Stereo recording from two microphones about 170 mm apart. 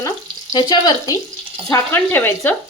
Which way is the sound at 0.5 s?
25° left (ahead or behind).